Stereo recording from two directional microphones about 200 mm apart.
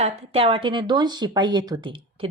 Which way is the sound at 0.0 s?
30° right (ahead or behind).